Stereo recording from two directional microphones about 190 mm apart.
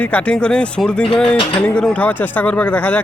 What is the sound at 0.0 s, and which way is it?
Speech, 5° left (ahead or behind).